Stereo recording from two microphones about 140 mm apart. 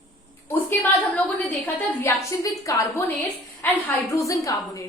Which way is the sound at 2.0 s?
20° left (ahead or behind).